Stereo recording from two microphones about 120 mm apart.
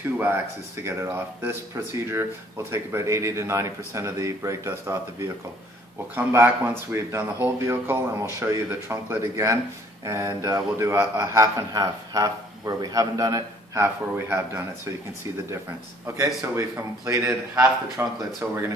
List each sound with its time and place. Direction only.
0.8 s a man's voice: 20° right (ahead or behind)
16.5 s a man's voice: 25° right (ahead or behind)